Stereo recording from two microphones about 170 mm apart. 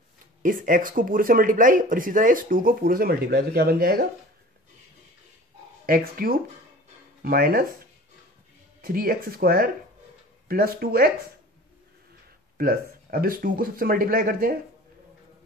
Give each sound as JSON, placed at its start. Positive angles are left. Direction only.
{"t": 0.4, "sound": "speech", "side_deg": -55}
{"t": 5.9, "sound": "speech", "side_deg": -60}
{"t": 8.8, "sound": "speech", "side_deg": -60}
{"t": 12.5, "sound": "speech", "side_deg": -60}